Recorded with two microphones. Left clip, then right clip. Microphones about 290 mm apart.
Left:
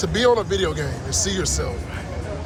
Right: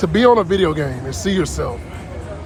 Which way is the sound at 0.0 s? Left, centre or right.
Right.